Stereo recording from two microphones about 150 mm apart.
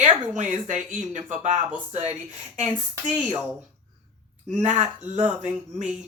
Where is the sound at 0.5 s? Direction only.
55° right (ahead or behind).